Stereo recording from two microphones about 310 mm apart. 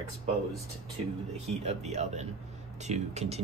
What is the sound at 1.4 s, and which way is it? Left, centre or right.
Speech, centre.